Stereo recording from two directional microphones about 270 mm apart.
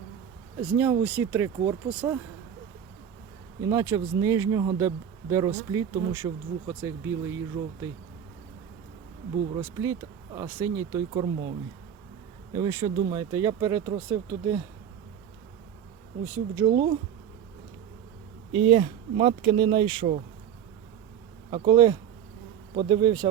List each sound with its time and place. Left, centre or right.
0.6 s speech: centre
3.6 s speech: centre
9.6 s speech: centre
12.5 s speech: centre
16.2 s speech: centre
18.5 s speech: right
21.5 s speech: centre